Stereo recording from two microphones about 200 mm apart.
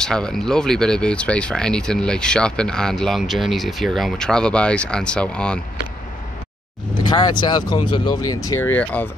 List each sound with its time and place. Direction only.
0.0 s speech: 5° left (ahead or behind)
7.1 s speech: 20° left (ahead or behind)